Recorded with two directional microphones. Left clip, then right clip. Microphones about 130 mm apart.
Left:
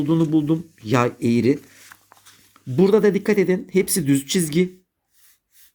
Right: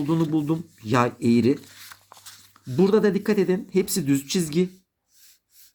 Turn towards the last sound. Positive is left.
turn(degrees=30)  # may be behind; listen again after turning